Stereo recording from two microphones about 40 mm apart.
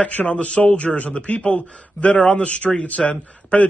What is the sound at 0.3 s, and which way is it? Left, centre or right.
A man's voice, left.